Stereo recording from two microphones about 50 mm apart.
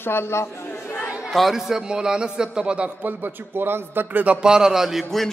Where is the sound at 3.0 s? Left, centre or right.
Right.